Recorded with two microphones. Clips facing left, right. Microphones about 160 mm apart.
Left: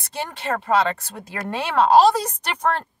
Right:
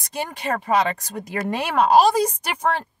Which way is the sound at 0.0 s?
15° right (ahead or behind).